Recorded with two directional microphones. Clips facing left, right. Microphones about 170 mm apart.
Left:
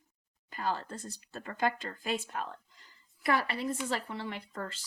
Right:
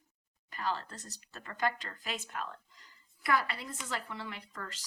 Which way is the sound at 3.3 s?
25° left (ahead or behind).